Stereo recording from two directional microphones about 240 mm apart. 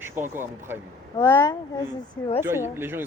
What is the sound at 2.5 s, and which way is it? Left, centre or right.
Speech, centre.